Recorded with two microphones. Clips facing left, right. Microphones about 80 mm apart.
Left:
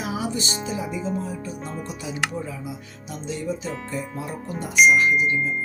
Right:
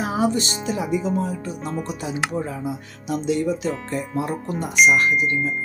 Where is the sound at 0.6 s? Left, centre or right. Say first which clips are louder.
Right 5 dB; right.